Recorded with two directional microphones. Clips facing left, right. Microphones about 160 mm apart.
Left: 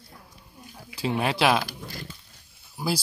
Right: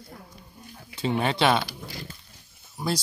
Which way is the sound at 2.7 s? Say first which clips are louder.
Even; 5° left (ahead or behind).